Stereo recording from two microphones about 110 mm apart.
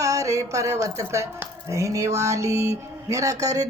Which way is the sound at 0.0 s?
30° right (ahead or behind).